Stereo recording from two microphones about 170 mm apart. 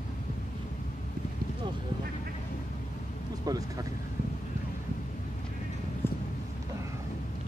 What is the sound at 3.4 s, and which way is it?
Speech, 20° right (ahead or behind).